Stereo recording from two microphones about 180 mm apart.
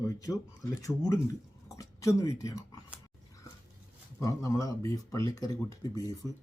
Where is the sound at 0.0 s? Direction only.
20° left (ahead or behind).